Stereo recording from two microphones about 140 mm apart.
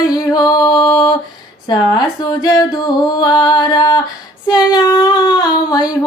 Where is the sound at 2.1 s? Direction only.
25° left (ahead or behind).